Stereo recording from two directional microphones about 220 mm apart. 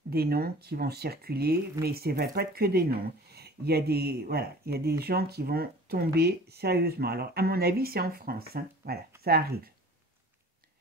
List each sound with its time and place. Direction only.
0.1 s speech: 45° right (ahead or behind)